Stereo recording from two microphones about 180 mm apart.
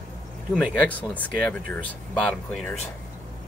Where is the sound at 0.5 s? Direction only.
5° left (ahead or behind).